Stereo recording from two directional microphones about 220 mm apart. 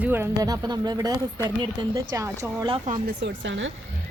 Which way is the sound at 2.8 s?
40° right (ahead or behind).